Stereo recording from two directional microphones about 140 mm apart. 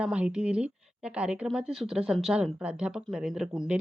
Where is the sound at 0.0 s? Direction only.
5° right (ahead or behind).